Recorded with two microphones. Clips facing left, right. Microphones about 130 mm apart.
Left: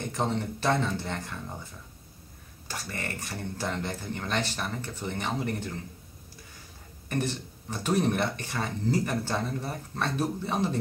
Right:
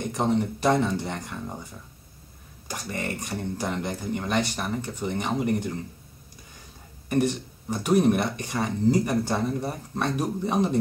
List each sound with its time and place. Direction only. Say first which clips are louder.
0.1 s speech: right 6 dB; 15° right (ahead or behind)
2.7 s speech: right 5 dB; 15° right (ahead or behind)
7.1 s speech: right 7 dB; 15° right (ahead or behind)